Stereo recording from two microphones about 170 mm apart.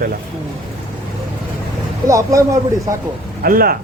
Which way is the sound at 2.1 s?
20° right (ahead or behind).